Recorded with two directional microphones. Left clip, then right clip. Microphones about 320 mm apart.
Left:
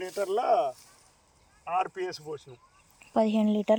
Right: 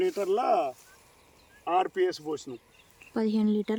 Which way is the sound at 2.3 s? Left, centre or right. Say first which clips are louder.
Right 4 dB; right.